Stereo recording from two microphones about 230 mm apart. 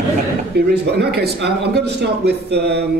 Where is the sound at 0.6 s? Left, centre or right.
Right.